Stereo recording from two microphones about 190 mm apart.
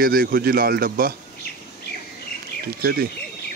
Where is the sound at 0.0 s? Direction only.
50° right (ahead or behind).